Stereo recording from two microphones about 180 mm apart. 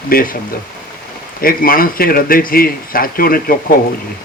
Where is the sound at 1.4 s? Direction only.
55° left (ahead or behind).